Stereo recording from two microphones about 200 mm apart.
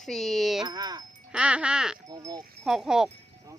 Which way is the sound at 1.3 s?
5° right (ahead or behind).